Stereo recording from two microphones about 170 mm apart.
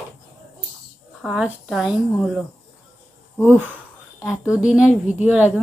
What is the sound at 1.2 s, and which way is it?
A woman's voice, 5° right (ahead or behind).